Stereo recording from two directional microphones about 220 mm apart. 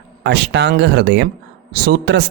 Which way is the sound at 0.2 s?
50° right (ahead or behind).